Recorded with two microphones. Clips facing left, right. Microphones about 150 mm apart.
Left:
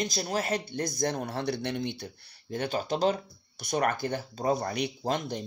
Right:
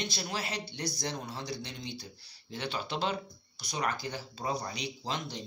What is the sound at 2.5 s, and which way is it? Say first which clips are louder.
Speech: left 6 dB; 45° left (ahead or behind).